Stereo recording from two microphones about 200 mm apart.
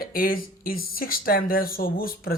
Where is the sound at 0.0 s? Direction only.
45° left (ahead or behind).